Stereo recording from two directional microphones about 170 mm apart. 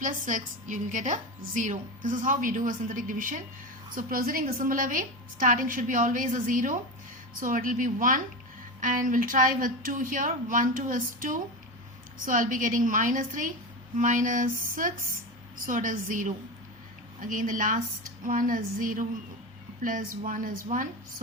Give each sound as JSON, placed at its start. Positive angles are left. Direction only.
{"t": 0.0, "sound": "a woman's voice", "side_deg": -50}